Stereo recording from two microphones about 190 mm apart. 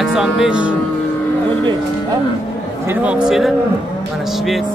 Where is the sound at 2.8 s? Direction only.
10° right (ahead or behind).